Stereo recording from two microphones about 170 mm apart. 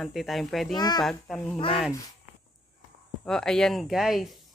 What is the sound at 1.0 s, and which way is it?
Speech, 5° left (ahead or behind).